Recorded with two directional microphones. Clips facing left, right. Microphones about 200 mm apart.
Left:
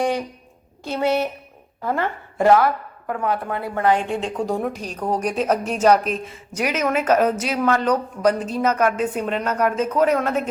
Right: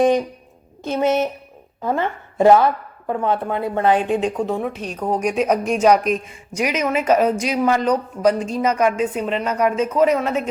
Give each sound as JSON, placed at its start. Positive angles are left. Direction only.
{"t": 0.0, "sound": "speech", "side_deg": -20}
{"t": 4.4, "sound": "speech", "side_deg": 0}